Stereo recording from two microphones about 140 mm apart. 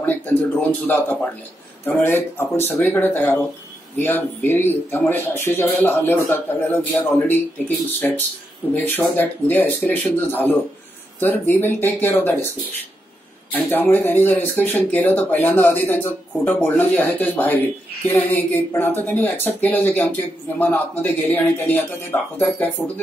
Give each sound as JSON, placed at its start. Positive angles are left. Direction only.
{"t": 0.0, "sound": "speech", "side_deg": 15}
{"t": 13.5, "sound": "speech", "side_deg": 15}